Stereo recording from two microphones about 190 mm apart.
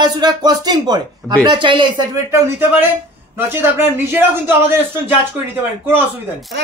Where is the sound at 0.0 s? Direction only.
20° right (ahead or behind).